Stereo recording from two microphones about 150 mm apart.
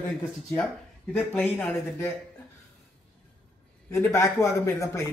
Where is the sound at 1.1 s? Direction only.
5° left (ahead or behind).